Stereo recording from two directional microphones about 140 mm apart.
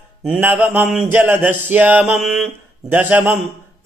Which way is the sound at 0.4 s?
15° right (ahead or behind).